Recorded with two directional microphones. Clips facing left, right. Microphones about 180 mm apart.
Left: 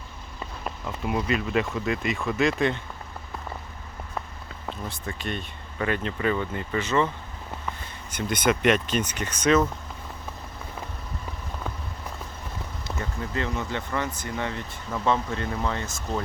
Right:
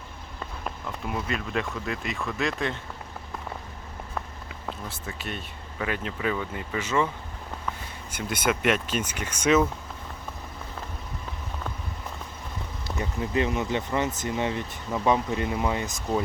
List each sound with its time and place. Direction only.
0.6 s speech: 5° left (ahead or behind)
4.4 s speech: 5° right (ahead or behind)
8.1 s speech: 5° right (ahead or behind)
13.0 s speech: 20° right (ahead or behind)